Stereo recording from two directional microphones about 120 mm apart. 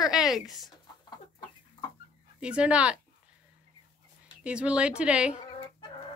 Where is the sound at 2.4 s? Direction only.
10° right (ahead or behind).